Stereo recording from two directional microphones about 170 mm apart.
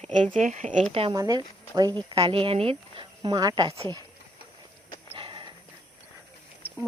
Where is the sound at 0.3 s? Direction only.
45° right (ahead or behind).